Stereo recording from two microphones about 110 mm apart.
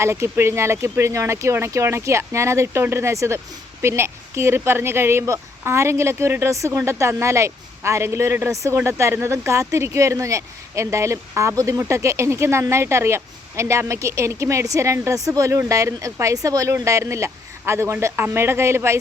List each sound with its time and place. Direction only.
0.0 s speech: 25° right (ahead or behind)